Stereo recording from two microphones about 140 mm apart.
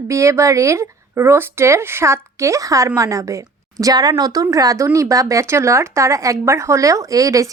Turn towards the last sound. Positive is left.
turn(degrees=-25)  # may be behind; listen again after turning